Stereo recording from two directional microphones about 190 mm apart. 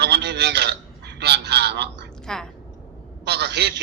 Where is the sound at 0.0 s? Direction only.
60° right (ahead or behind).